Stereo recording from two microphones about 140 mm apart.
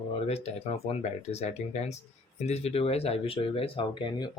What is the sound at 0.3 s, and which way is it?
Speech, 50° left (ahead or behind).